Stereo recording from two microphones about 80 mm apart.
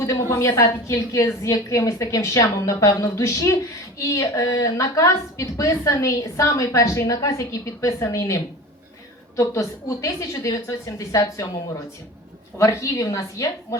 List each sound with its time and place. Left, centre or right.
0.0 s a woman's voice: left
12.5 s a woman's voice: left